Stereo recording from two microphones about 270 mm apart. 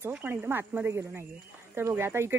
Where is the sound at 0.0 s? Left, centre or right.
Centre.